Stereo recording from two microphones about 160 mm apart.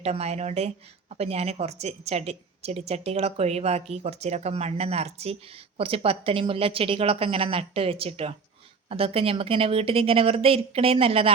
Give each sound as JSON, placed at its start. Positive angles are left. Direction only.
{"t": 0.0, "sound": "a woman's voice", "side_deg": -40}